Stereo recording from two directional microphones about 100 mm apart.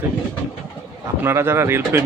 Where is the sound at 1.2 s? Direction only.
25° right (ahead or behind).